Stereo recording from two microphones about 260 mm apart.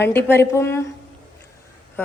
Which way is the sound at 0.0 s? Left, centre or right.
Centre.